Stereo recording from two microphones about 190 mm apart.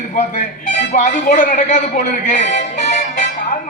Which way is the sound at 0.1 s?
40° left (ahead or behind).